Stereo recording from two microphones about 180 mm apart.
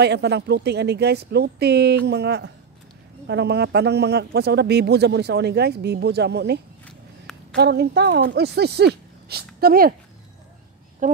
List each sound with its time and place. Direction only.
0.0 s speech: 65° right (ahead or behind)
11.0 s speech: 45° right (ahead or behind)